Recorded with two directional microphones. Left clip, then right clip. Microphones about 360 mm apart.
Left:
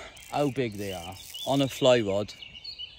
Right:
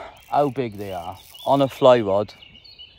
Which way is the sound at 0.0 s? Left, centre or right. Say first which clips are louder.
Right 8 dB; centre.